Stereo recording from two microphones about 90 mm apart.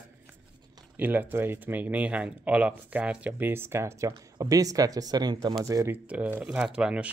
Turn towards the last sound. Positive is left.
turn(degrees=-10)  # may be behind; listen again after turning